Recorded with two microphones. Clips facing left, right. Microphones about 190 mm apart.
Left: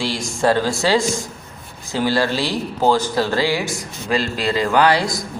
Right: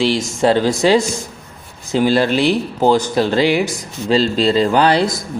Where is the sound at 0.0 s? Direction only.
20° right (ahead or behind).